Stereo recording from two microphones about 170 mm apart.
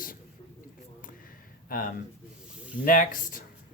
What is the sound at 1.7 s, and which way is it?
A man's voice, 55° left (ahead or behind).